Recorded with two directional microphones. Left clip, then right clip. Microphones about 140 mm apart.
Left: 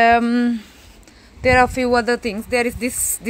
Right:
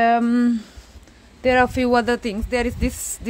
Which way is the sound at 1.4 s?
25° right (ahead or behind).